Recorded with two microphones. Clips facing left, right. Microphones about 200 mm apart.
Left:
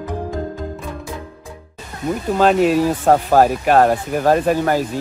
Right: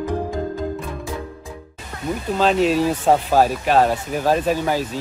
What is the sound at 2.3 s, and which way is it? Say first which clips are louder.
Speech: left 3 dB; 50° left (ahead or behind).